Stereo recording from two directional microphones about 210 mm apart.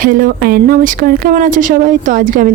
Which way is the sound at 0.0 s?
40° right (ahead or behind).